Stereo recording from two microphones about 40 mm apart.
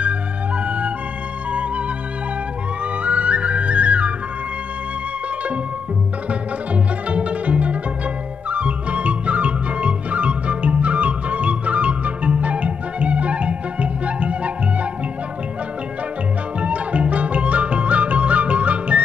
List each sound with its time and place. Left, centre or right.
0.7 s music: right
3.0 s music: right
6.7 s music: right
16.6 s music: right